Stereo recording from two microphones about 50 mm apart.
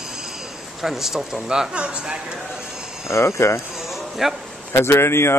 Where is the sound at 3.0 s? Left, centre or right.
Left.